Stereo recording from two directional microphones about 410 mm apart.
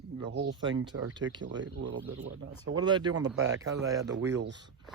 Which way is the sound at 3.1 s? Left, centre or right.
Right.